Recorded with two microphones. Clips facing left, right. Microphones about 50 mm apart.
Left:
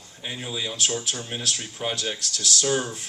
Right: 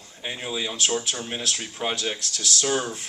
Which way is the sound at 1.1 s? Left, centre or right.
Right.